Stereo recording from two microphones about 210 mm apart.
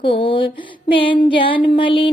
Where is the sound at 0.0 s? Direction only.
25° left (ahead or behind).